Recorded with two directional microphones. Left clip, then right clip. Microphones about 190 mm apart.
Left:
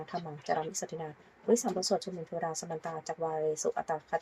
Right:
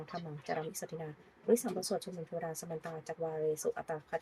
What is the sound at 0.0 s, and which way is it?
A woman's voice, 5° left (ahead or behind).